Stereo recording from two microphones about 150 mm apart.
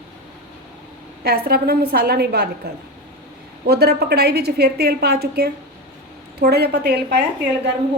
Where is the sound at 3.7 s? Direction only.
90° right.